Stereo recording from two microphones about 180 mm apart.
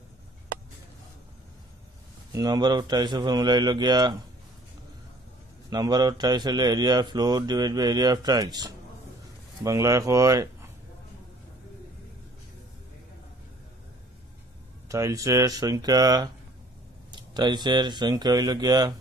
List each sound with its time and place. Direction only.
2.3 s speech: 20° right (ahead or behind)
5.7 s speech: 20° right (ahead or behind)
14.9 s speech: 15° right (ahead or behind)